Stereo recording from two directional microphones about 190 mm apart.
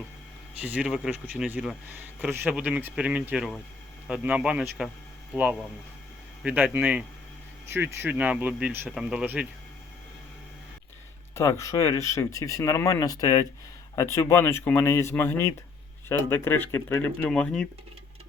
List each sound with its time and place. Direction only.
0.6 s a man's voice: 5° right (ahead or behind)
11.3 s speech: 15° left (ahead or behind)